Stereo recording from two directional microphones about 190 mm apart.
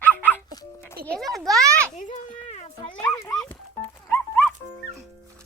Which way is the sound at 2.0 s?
35° left (ahead or behind).